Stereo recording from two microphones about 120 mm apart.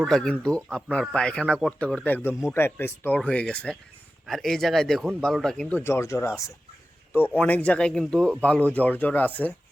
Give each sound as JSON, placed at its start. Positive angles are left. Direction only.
{"t": 0.0, "sound": "speech", "side_deg": 5}
{"t": 7.1, "sound": "speech", "side_deg": 15}